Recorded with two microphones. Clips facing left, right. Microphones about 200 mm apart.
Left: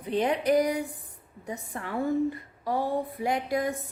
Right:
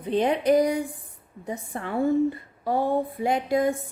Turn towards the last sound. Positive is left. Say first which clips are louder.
# right 5 dB
turn(degrees=-25)  # may be behind; listen again after turning